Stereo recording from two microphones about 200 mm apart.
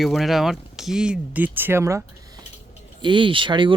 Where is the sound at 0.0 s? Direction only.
Centre (ahead or behind).